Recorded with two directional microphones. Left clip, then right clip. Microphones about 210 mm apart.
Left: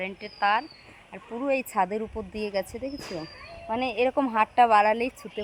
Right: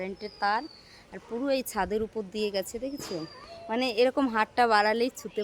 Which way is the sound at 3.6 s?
5° left (ahead or behind).